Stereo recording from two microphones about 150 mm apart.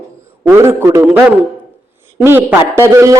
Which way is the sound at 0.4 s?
15° right (ahead or behind).